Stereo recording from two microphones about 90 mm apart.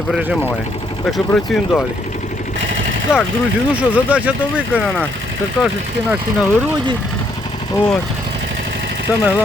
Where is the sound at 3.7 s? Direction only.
15° right (ahead or behind).